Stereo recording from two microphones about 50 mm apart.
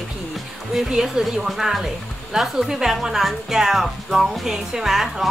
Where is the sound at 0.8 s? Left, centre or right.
Centre.